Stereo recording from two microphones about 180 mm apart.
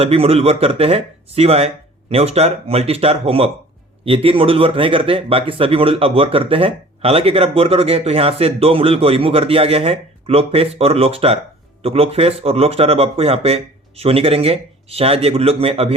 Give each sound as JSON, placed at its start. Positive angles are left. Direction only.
{"t": 0.0, "sound": "speech", "side_deg": -35}